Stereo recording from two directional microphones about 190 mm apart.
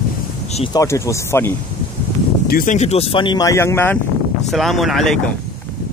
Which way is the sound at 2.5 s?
45° left (ahead or behind).